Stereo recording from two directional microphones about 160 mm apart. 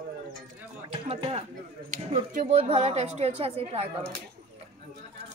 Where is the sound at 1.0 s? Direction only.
40° right (ahead or behind).